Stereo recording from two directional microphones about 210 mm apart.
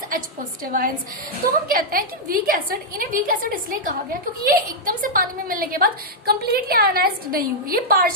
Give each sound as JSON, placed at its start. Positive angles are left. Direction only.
{"t": 0.6, "sound": "a woman's voice", "side_deg": -45}